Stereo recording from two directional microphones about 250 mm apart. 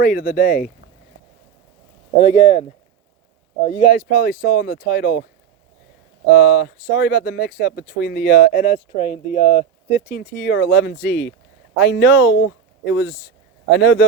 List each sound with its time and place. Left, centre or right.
0.0 s speech: left
2.2 s speech: left
3.7 s speech: left
6.3 s speech: left